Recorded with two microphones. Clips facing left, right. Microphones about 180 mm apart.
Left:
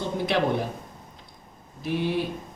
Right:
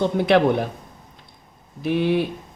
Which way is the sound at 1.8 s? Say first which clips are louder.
Right 6 dB; 65° right (ahead or behind).